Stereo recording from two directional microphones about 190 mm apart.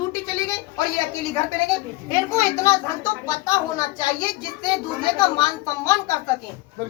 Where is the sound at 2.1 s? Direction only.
15° left (ahead or behind).